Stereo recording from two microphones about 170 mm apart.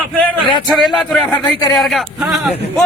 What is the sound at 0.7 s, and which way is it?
A man's voice, centre (ahead or behind).